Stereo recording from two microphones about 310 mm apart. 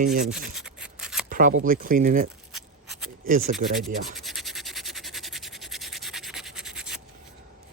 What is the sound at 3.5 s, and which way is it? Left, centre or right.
Speech, centre.